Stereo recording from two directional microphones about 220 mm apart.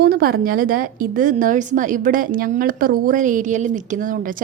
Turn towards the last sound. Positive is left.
turn(degrees=-35)  # may be behind; listen again after turning